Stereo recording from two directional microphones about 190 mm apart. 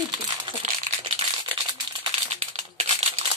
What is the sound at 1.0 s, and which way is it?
Crumpling, 25° right (ahead or behind).